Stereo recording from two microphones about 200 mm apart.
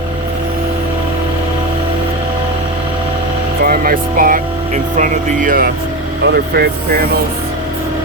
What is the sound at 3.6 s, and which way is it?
Speech, 45° right (ahead or behind).